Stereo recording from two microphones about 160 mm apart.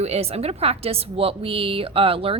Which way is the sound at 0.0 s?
40° right (ahead or behind).